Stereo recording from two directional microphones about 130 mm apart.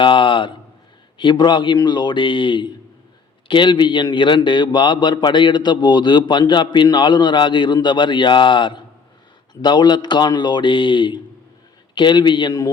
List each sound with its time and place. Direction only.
0.0 s a man's voice: 40° left (ahead or behind)